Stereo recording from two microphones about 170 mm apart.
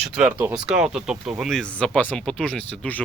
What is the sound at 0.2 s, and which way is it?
Speech, 10° right (ahead or behind).